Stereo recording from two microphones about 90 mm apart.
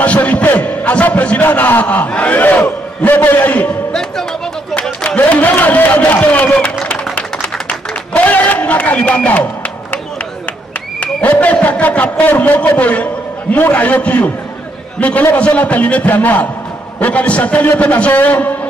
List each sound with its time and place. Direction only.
0.0 s a man's voice: 15° left (ahead or behind)
4.7 s speech: 10° left (ahead or behind)
8.1 s music: 15° left (ahead or behind)
11.0 s a man's voice: 20° left (ahead or behind)